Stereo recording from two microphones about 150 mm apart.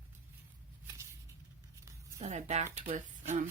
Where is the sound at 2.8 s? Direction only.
60° right (ahead or behind).